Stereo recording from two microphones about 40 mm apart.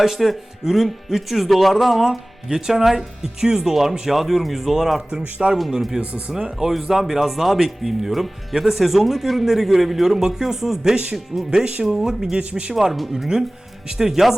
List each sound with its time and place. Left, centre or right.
0.0 s speech: centre
2.0 s speech: centre
6.3 s speech: centre
10.9 s speech: right
12.4 s speech: right
12.7 s speech: centre